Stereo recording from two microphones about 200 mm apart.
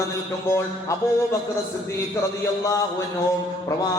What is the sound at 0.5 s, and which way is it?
Speech, 15° left (ahead or behind).